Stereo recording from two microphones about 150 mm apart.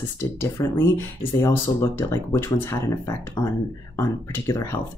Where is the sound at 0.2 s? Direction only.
15° left (ahead or behind).